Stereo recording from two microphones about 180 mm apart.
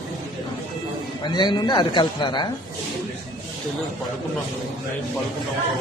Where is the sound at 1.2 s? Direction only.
25° left (ahead or behind).